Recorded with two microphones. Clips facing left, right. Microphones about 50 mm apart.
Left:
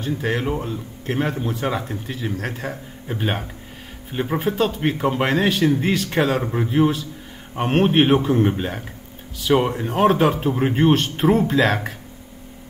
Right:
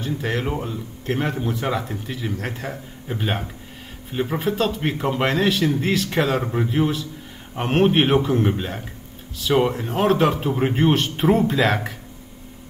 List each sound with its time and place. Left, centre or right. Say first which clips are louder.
0.0 s speech: left 2 dB; centre